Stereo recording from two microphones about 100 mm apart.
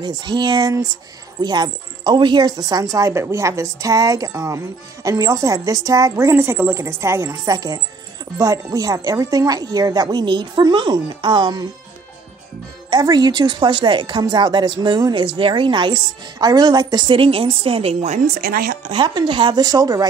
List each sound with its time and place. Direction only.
0.0 s a woman's voice: 50° right (ahead or behind)
2.8 s a woman's voice: 30° right (ahead or behind); by 11.6 s 50° right (ahead or behind)
12.9 s a woman's voice: 45° right (ahead or behind)
15.2 s a woman's voice: 60° right (ahead or behind)
18.9 s a woman's voice: 50° right (ahead or behind)
19.6 s a woman's voice: 40° right (ahead or behind)